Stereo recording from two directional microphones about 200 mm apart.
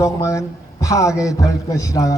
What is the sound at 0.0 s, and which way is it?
A man's voice, 15° left (ahead or behind).